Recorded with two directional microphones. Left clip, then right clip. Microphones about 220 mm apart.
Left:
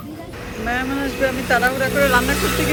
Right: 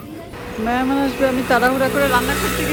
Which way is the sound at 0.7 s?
20° right (ahead or behind).